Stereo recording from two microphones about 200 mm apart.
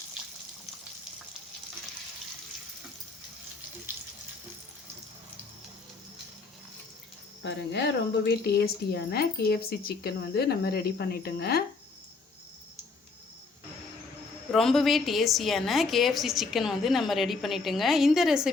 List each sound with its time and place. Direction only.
7.4 s speech: 55° left (ahead or behind)
14.5 s a woman's voice: centre (ahead or behind)